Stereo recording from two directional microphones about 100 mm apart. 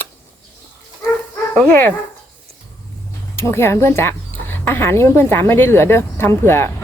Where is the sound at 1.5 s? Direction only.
20° left (ahead or behind).